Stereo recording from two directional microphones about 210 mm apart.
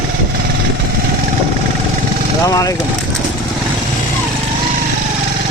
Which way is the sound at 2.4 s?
15° left (ahead or behind).